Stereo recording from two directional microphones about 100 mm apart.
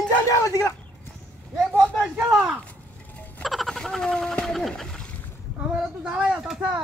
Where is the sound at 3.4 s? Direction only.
Centre (ahead or behind).